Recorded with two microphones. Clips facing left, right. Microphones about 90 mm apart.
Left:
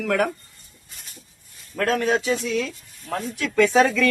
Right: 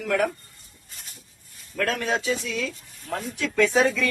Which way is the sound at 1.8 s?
40° left (ahead or behind).